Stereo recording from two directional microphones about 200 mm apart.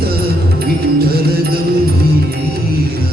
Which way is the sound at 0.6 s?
50° right (ahead or behind).